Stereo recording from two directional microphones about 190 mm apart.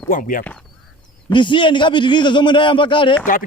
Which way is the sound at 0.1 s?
45° left (ahead or behind).